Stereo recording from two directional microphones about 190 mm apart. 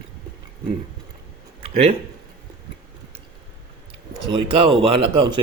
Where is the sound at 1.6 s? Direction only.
30° right (ahead or behind).